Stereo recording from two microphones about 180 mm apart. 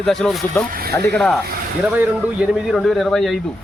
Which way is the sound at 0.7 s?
55° right (ahead or behind).